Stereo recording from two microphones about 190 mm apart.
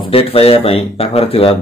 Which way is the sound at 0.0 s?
30° left (ahead or behind).